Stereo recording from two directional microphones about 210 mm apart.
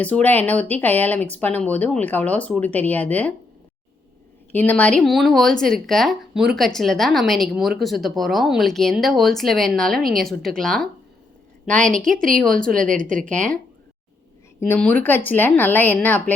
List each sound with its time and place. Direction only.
0.0 s speech: 5° left (ahead or behind)
4.5 s speech: 5° left (ahead or behind)
12.6 s a woman's voice: 40° right (ahead or behind)
13.1 s speech: 5° left (ahead or behind)
14.6 s speech: 5° left (ahead or behind)